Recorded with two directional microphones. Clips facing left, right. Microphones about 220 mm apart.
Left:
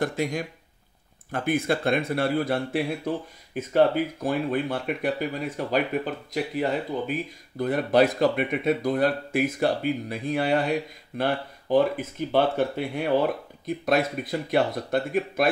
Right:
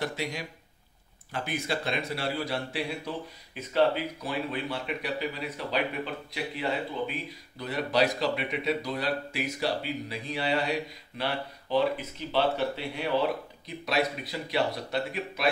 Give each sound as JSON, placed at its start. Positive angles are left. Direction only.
{"t": 0.0, "sound": "speech", "side_deg": 50}